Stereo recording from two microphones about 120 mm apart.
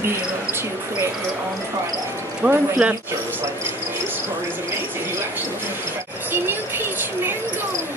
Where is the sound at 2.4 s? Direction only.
10° right (ahead or behind).